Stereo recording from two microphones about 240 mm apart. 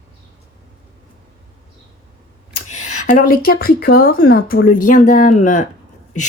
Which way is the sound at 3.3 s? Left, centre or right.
Left.